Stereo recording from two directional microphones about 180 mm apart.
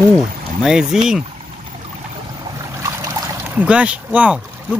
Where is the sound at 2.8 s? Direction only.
15° right (ahead or behind).